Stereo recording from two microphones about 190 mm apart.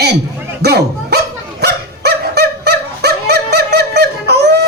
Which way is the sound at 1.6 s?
60° right (ahead or behind).